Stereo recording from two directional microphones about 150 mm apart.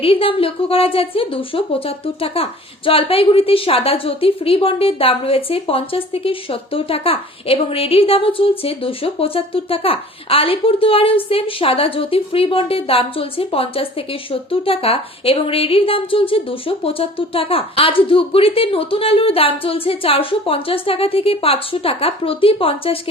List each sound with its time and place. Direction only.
0.0 s a woman's voice: 40° left (ahead or behind)